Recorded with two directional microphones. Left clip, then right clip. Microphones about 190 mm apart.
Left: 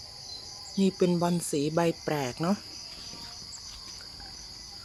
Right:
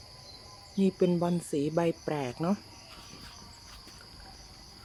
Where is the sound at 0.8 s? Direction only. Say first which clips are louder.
Left 1 dB; centre (ahead or behind).